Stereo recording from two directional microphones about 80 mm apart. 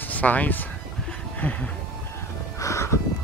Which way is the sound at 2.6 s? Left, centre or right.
Left.